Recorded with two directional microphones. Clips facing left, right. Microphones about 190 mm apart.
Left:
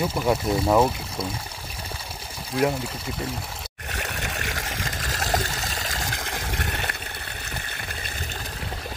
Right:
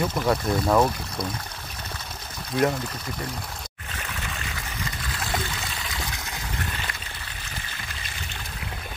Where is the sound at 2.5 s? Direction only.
10° left (ahead or behind).